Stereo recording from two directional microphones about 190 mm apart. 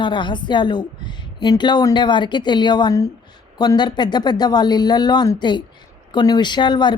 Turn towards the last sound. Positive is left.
turn(degrees=25)  # may be behind; listen again after turning